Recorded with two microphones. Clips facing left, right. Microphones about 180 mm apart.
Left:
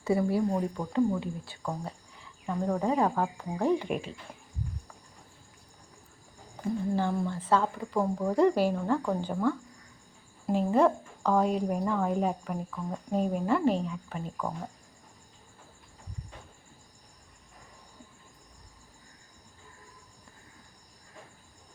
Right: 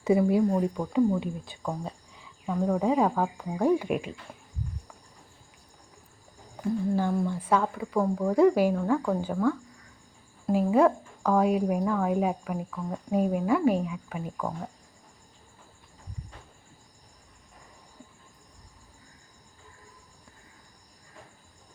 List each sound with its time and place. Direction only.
0.0 s speech: 20° right (ahead or behind)
1.8 s cricket: 15° right (ahead or behind)
2.5 s speech: 5° right (ahead or behind)
6.9 s speech: 10° right (ahead or behind)